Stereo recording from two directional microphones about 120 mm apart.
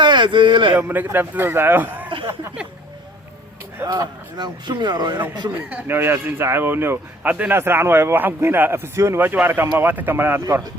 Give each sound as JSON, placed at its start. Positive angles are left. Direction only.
{"t": 0.0, "sound": "speech", "side_deg": -40}
{"t": 0.8, "sound": "speech", "side_deg": -15}
{"t": 3.8, "sound": "speech", "side_deg": -35}
{"t": 5.7, "sound": "speech", "side_deg": -20}
{"t": 10.4, "sound": "speech", "side_deg": -30}